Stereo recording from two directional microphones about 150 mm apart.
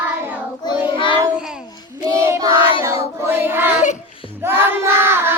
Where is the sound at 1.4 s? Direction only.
5° right (ahead or behind).